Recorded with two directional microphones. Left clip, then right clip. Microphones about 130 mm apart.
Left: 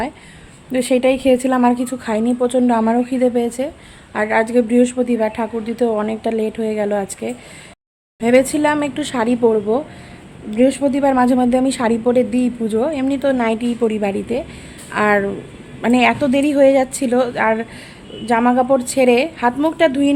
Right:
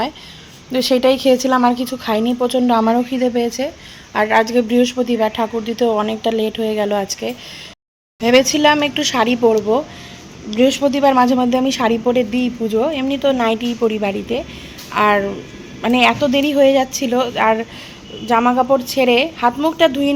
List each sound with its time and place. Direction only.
0.7 s a woman's voice: 15° left (ahead or behind)